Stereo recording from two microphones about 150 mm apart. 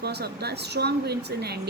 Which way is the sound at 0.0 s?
90° right.